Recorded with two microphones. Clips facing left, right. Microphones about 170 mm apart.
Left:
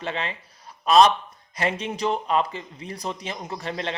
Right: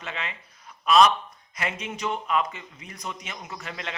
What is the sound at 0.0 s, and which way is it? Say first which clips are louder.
A man's voice: left 6 dB; 35° left (ahead or behind).